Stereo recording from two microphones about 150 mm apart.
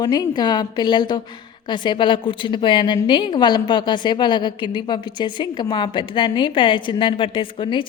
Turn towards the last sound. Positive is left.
turn(degrees=35)  # may be behind; listen again after turning